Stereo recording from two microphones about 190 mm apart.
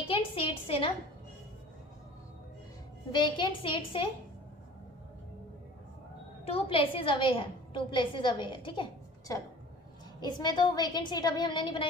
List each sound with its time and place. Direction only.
0.1 s a sound: 30° left (ahead or behind)
3.1 s a woman's voice: 25° left (ahead or behind)
6.4 s a woman's voice: 30° left (ahead or behind)